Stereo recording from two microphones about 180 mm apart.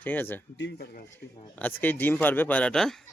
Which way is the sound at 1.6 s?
10° left (ahead or behind).